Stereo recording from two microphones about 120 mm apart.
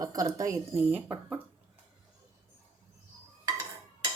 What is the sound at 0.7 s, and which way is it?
Speech, 10° right (ahead or behind).